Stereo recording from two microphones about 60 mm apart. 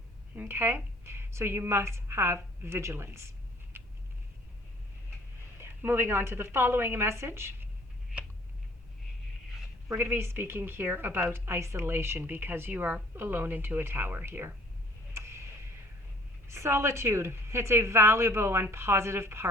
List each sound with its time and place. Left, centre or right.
0.3 s a woman's voice: right
5.5 s a woman's voice: right
9.9 s a woman's voice: right
15.1 s a sound: right
16.5 s a woman's voice: right